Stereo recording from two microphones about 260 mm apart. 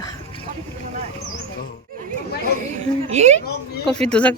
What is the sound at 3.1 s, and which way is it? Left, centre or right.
Speech, right.